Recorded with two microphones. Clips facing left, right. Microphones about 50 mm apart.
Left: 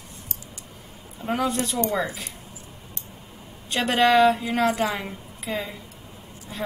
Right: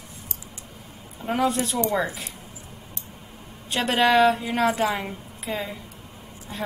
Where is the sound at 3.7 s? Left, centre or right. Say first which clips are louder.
Left 1 dB; centre.